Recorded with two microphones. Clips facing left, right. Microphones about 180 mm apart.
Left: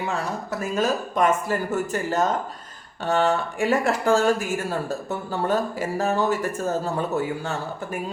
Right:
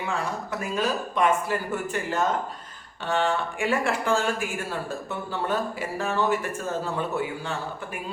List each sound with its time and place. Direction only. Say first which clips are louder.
0.8 s speech: left 3 dB; 45° left (ahead or behind)